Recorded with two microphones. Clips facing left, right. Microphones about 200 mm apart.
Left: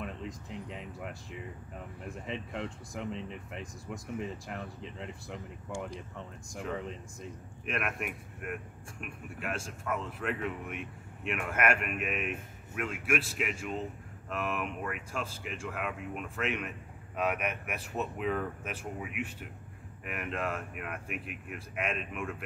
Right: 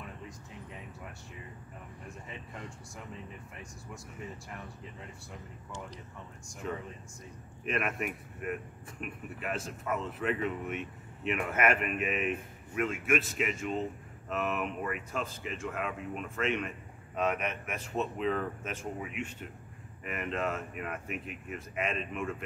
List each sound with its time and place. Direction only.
0.0 s speech: 75° left (ahead or behind)
7.6 s speech: centre (ahead or behind)